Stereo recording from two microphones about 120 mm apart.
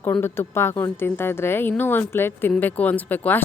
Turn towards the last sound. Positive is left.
turn(degrees=15)  # may be behind; listen again after turning